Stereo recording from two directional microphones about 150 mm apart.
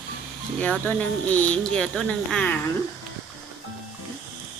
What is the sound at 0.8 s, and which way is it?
Speech, 10° left (ahead or behind).